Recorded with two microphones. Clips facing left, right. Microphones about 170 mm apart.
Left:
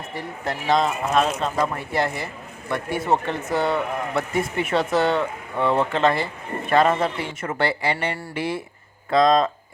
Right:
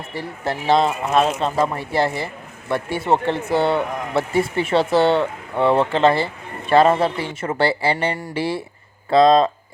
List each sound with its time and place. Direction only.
0.1 s speech: 30° right (ahead or behind)